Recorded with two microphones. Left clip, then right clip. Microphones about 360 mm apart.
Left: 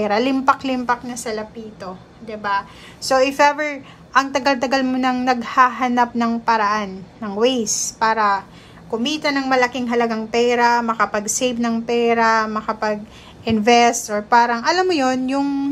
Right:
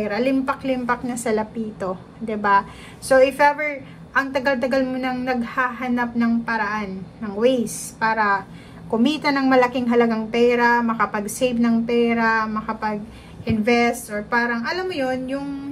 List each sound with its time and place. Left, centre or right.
0.0 s a woman's voice: centre